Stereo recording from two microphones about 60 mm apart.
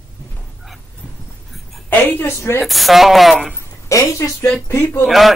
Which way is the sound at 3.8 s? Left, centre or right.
Left.